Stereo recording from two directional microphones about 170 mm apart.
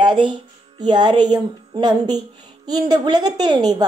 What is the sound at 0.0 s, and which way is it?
A woman's voice, 25° right (ahead or behind).